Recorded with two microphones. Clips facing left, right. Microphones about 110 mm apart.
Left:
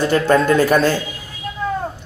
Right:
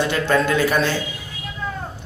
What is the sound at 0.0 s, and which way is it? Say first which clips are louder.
Speech: left 4 dB; 40° left (ahead or behind).